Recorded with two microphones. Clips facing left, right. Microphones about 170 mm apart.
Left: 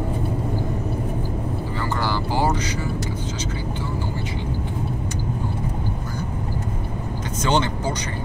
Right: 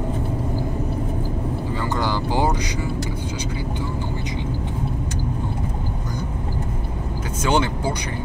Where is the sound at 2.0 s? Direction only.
20° right (ahead or behind).